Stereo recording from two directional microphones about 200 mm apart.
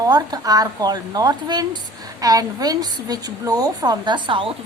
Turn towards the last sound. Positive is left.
turn(degrees=-25)  # may be behind; listen again after turning